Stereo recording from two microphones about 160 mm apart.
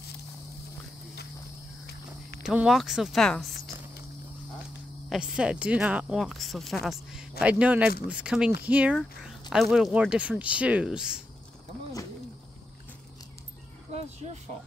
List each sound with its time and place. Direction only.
2.4 s speech: 5° right (ahead or behind)
5.1 s speech: 5° right (ahead or behind)
13.9 s a sound: 40° right (ahead or behind)